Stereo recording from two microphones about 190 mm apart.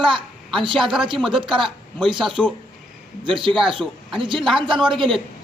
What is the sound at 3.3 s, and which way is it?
Speech, 25° right (ahead or behind).